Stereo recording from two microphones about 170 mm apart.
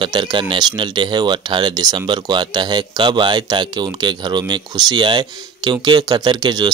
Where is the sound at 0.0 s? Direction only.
30° right (ahead or behind).